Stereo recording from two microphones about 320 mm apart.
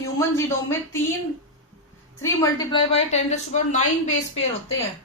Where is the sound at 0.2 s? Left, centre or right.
Centre.